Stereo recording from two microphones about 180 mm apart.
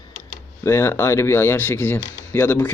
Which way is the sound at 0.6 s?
15° left (ahead or behind).